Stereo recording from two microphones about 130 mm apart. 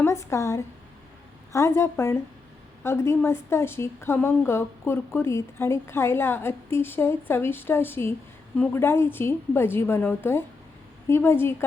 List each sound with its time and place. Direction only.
0.0 s a woman's voice: 20° left (ahead or behind)